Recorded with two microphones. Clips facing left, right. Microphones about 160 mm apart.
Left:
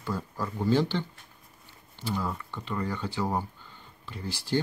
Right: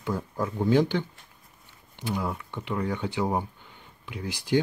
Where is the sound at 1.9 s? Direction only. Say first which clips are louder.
Right 2 dB; 15° right (ahead or behind).